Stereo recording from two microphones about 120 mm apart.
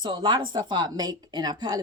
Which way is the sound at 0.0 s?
40° right (ahead or behind).